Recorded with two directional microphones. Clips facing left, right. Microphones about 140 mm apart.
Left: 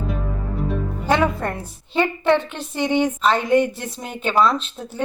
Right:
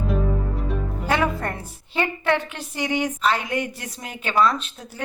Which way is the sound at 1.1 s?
20° left (ahead or behind).